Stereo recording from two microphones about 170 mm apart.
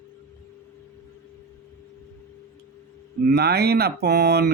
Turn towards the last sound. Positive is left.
turn(degrees=-70)  # may be behind; listen again after turning